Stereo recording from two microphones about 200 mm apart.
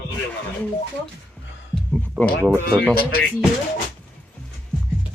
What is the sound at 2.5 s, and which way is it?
Speech, centre (ahead or behind).